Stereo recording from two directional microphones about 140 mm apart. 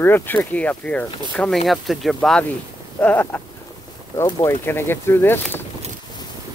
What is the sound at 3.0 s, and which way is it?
Speech, 10° left (ahead or behind).